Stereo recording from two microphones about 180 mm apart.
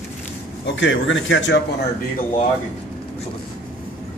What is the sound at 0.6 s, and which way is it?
Speech, 90° left.